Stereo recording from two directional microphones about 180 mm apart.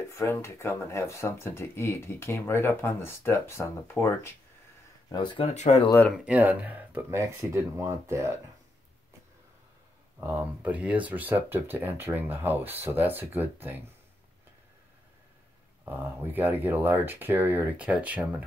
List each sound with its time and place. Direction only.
0.1 s speech: 15° left (ahead or behind)
5.1 s speech: 25° left (ahead or behind)
5.5 s speech: 35° left (ahead or behind)
5.9 s speech: 10° left (ahead or behind)
6.1 s speech: 10° right (ahead or behind)
10.2 s speech: 10° right (ahead or behind)
15.8 s speech: 10° right (ahead or behind)